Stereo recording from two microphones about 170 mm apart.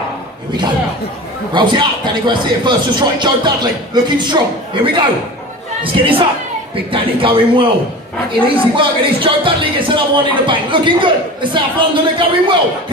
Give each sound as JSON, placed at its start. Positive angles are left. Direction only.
{"t": 1.5, "sound": "a man's voice", "side_deg": -25}